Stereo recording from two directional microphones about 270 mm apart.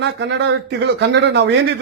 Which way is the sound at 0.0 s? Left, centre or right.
Right.